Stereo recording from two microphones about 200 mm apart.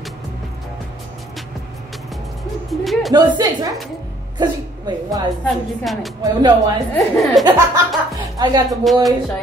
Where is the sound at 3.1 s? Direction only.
20° right (ahead or behind).